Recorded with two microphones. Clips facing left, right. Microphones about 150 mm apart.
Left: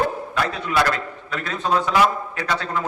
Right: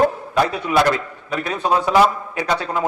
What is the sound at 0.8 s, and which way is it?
A man's voice, 20° right (ahead or behind).